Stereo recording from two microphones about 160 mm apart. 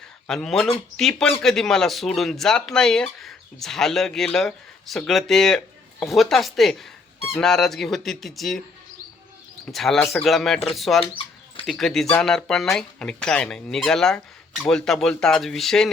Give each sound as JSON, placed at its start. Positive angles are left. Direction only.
{"t": 0.3, "sound": "speech", "side_deg": 5}
{"t": 9.7, "sound": "speech", "side_deg": 0}